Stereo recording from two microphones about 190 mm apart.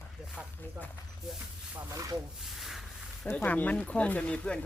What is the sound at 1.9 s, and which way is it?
Speech, 20° right (ahead or behind).